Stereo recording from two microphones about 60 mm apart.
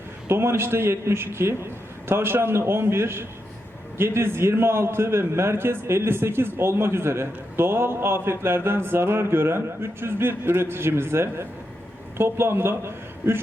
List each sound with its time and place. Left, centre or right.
0.3 s a man's voice: right